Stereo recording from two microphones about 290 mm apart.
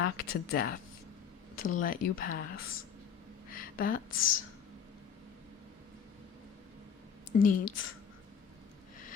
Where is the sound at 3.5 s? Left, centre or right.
Left.